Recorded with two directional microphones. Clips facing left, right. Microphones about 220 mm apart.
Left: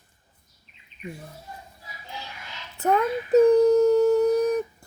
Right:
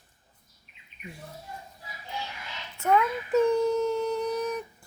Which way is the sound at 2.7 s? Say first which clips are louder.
Left 2 dB; 35° left (ahead or behind).